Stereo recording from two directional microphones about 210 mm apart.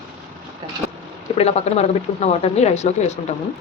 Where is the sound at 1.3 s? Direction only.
30° left (ahead or behind).